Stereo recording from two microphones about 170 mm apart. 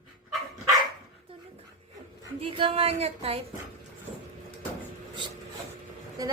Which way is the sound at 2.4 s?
30° right (ahead or behind).